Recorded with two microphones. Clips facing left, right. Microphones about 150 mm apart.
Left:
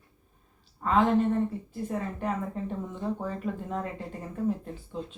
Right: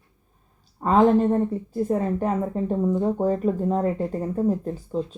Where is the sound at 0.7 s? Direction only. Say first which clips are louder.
Right 6 dB; 40° right (ahead or behind).